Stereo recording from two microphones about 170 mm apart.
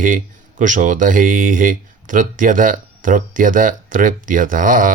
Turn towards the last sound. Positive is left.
turn(degrees=-50)  # may be behind; listen again after turning